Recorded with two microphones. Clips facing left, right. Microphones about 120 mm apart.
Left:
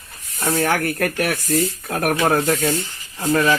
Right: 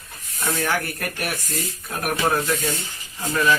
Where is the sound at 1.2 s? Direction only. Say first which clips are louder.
Left 9 dB; 65° left (ahead or behind).